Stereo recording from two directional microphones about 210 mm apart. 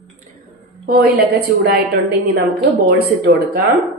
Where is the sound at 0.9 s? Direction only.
45° right (ahead or behind).